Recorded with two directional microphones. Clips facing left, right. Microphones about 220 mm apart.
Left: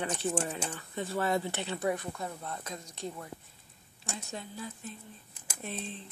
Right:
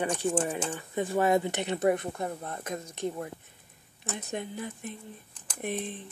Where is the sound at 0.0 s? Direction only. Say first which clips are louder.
Right 4 dB; 10° right (ahead or behind).